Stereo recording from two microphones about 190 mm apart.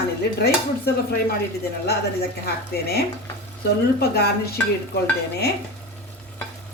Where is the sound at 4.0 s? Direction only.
55° left (ahead or behind).